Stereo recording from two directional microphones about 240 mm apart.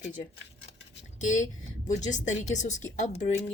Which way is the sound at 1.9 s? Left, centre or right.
Left.